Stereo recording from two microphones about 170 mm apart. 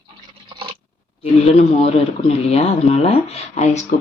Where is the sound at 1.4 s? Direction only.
35° left (ahead or behind).